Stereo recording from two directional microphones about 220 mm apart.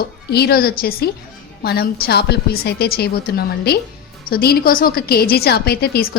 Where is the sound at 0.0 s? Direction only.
45° left (ahead or behind).